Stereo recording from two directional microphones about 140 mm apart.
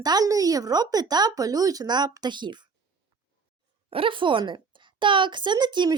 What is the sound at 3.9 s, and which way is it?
A woman's voice, 40° right (ahead or behind).